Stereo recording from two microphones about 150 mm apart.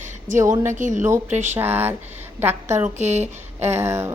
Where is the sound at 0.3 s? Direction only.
20° right (ahead or behind).